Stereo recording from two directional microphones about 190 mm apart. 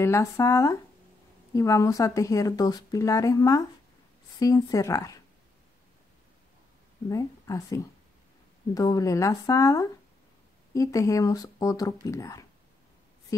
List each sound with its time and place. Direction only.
0.0 s speech: 15° left (ahead or behind)
7.1 s speech: 15° left (ahead or behind)